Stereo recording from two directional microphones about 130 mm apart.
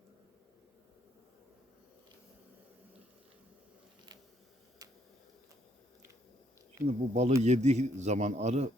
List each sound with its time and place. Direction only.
6.8 s a man's voice: 55° right (ahead or behind)